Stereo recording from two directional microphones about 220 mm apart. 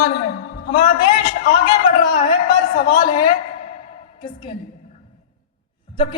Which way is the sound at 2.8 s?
20° left (ahead or behind).